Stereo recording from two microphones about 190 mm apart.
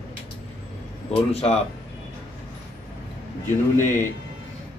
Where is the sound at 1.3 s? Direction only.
35° left (ahead or behind).